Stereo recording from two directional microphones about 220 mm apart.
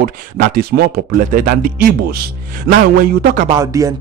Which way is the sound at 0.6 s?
45° right (ahead or behind).